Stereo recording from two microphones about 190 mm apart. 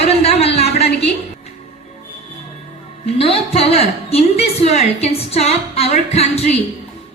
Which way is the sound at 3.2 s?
30° left (ahead or behind).